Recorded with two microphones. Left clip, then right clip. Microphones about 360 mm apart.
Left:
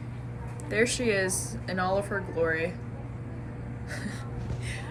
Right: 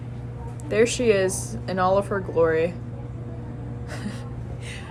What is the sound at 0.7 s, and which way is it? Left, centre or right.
A woman's voice, centre.